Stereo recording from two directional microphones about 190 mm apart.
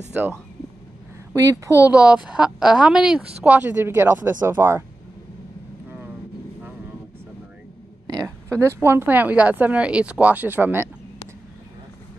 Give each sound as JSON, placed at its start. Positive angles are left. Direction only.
{"t": 0.1, "sound": "a woman's voice", "side_deg": -10}
{"t": 1.3, "sound": "a woman's voice", "side_deg": -15}
{"t": 8.1, "sound": "a woman's voice", "side_deg": -15}